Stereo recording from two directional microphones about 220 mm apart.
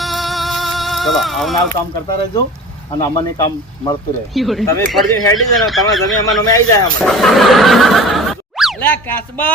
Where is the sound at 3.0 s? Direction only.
20° left (ahead or behind).